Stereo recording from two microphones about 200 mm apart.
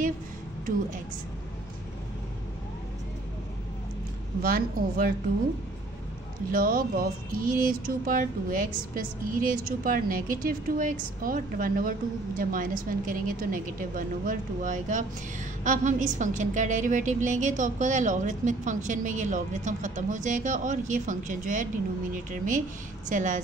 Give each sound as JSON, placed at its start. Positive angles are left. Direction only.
{"t": 4.4, "sound": "speech", "side_deg": -45}
{"t": 6.5, "sound": "a woman's voice", "side_deg": -45}